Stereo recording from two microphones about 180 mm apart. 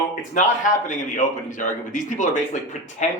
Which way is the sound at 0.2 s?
45° left (ahead or behind).